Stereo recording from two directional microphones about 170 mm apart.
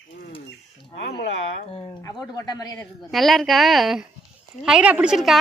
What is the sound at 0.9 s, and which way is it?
Speech, 80° left.